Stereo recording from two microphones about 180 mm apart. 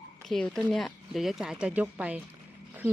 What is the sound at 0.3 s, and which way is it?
Speech, 5° left (ahead or behind).